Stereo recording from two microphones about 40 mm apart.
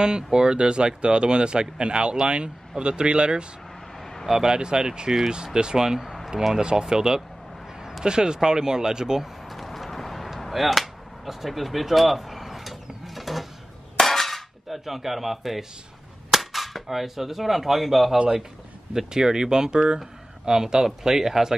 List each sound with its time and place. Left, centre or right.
0.0 s speech: centre
4.0 s a sound: centre
4.3 s speech: centre
9.5 s a sound: centre
13.0 s mechanisms: centre
13.9 s cap gun: centre
18.9 s speech: centre